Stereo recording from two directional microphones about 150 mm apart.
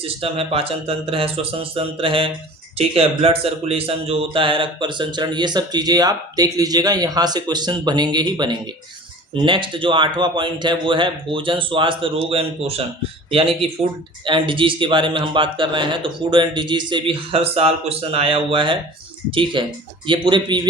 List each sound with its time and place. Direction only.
0.0 s a man's voice: 40° right (ahead or behind)